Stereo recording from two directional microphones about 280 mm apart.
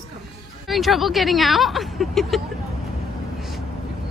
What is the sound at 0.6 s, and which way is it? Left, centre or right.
Speech, centre.